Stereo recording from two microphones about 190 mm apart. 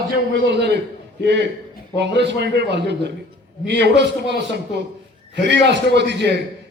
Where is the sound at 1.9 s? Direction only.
65° right (ahead or behind).